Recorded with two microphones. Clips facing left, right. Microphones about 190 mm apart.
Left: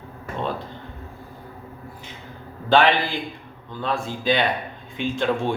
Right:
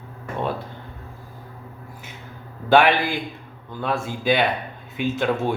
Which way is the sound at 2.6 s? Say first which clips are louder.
Right 1 dB; 10° right (ahead or behind).